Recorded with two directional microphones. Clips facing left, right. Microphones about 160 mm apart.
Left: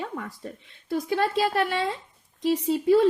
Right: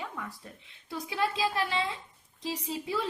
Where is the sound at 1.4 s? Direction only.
55° left (ahead or behind).